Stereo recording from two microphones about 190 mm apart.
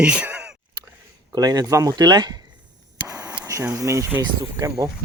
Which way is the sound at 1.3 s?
20° right (ahead or behind).